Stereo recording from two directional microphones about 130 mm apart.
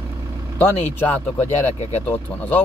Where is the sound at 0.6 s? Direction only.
15° left (ahead or behind).